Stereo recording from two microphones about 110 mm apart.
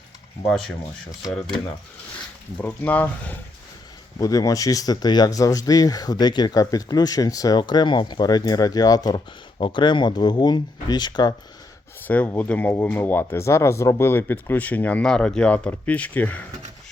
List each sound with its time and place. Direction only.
2.6 s speech: 15° left (ahead or behind)
4.2 s speech: 30° left (ahead or behind)
9.6 s speech: 50° left (ahead or behind)
12.0 s speech: 15° left (ahead or behind)